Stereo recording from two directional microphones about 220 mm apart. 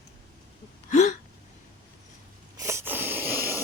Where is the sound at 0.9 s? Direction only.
35° left (ahead or behind).